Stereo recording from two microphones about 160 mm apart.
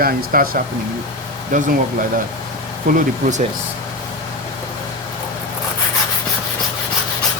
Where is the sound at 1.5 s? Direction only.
50° right (ahead or behind).